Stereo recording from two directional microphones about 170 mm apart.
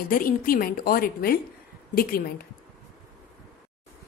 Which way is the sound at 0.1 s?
55° left (ahead or behind).